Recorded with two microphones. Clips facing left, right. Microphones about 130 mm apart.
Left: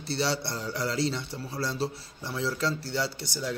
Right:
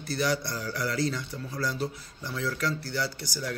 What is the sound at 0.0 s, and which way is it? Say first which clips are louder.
Speech: right 1 dB; 30° left (ahead or behind).